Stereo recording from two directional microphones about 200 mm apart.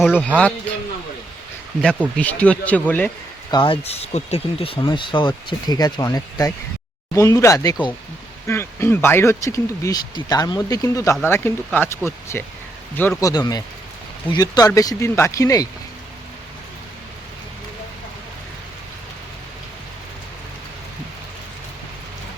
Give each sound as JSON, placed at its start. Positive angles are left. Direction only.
{"t": 0.0, "sound": "a man's voice", "side_deg": 0}
{"t": 2.1, "sound": "speech", "side_deg": 5}
{"t": 3.5, "sound": "speech", "side_deg": 25}